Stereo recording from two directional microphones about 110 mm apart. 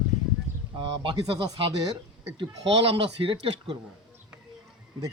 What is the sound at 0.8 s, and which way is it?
Speech, 45° right (ahead or behind).